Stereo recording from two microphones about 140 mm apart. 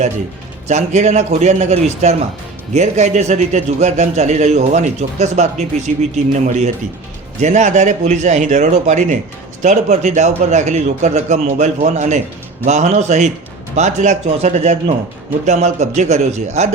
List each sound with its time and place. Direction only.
0.7 s a man's voice: 55° right (ahead or behind)